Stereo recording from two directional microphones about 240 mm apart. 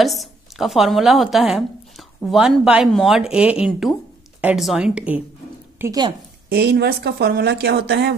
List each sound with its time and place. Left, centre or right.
0.0 s a woman's voice: centre
5.8 s a woman's voice: centre
6.5 s speech: right